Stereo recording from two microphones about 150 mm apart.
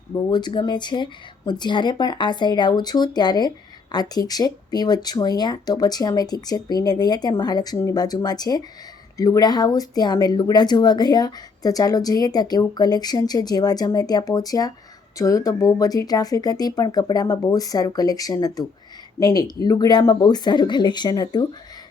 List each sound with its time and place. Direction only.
0.1 s speech: 30° left (ahead or behind)